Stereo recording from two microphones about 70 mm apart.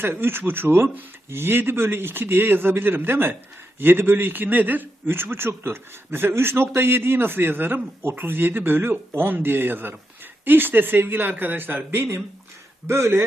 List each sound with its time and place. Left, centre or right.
0.0 s a man's voice: right